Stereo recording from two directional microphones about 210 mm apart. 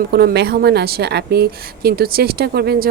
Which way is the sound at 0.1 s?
50° right (ahead or behind).